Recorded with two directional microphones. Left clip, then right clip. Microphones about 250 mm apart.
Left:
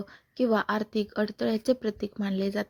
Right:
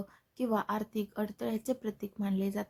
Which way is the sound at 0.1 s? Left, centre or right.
Centre.